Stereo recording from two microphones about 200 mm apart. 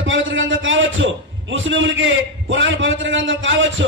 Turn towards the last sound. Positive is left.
turn(degrees=-70)  # may be behind; listen again after turning